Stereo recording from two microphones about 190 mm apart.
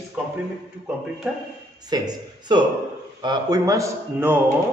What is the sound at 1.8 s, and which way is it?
A man's voice, 20° right (ahead or behind).